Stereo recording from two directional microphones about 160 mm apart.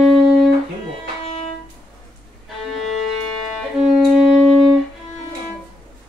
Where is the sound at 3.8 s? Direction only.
Centre (ahead or behind).